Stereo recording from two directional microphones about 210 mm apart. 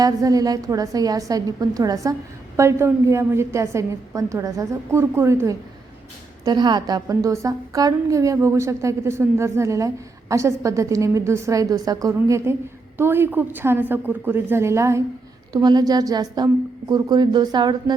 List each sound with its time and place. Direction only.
0.0 s a woman's voice: 15° right (ahead or behind)